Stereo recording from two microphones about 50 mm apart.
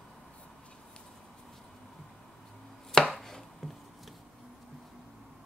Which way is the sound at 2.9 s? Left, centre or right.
Centre.